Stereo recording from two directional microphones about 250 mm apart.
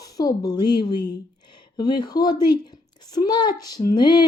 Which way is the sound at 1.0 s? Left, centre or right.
Centre.